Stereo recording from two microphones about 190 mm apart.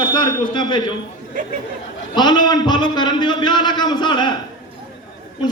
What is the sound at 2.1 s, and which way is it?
A man's voice, 25° left (ahead or behind).